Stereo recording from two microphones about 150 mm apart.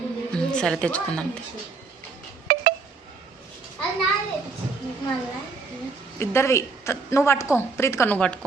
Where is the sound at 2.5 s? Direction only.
70° right (ahead or behind).